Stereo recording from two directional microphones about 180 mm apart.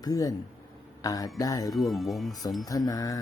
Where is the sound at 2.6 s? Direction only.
20° left (ahead or behind).